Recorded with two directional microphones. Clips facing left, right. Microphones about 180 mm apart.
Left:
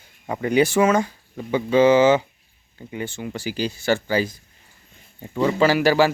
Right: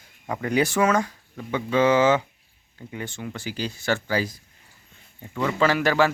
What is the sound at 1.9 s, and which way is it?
Speech, 5° left (ahead or behind).